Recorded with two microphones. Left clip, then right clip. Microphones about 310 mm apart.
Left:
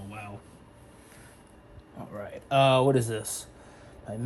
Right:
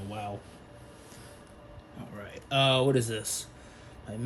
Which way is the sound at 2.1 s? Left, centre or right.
Centre.